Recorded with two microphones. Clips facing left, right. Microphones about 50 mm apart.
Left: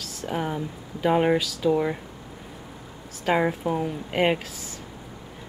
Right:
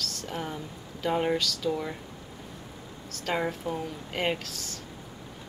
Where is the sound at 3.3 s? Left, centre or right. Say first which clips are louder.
Left 7 dB; centre.